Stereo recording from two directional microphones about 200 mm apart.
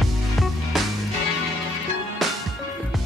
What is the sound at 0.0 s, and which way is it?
Music, centre (ahead or behind).